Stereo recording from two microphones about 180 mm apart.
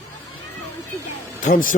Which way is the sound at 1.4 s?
50° left (ahead or behind).